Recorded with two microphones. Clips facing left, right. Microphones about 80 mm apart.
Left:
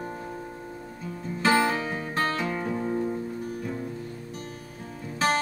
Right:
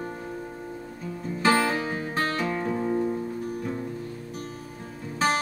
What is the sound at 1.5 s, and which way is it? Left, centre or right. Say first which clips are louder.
Music: even; centre.